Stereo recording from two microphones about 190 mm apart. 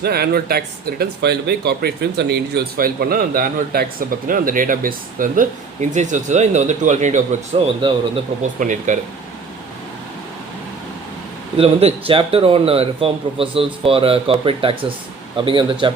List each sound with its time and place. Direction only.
0.0 s speech: 55° right (ahead or behind); by 7.2 s 40° right (ahead or behind)
7.8 s speech: 25° right (ahead or behind)
8.5 s speech: 40° right (ahead or behind)
11.5 s speech: 30° right (ahead or behind)